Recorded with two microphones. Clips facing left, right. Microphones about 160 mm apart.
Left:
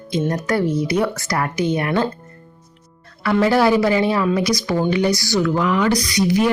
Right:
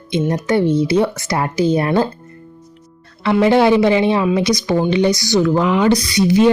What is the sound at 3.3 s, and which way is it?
Speech, 20° right (ahead or behind).